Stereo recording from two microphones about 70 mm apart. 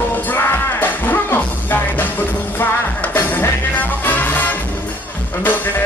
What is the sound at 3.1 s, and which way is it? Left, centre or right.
Music, left.